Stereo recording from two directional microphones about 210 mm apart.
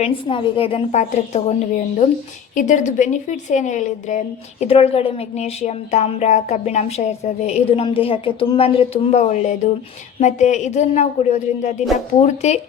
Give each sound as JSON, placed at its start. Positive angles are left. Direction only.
{"t": 0.0, "sound": "a woman's voice", "side_deg": 25}